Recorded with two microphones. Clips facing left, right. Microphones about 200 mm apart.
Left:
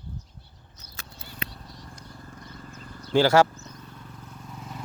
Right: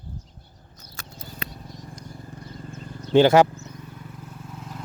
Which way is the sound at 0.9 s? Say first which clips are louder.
Right 4 dB; 45° right (ahead or behind).